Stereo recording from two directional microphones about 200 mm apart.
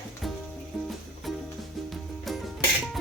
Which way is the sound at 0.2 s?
Centre (ahead or behind).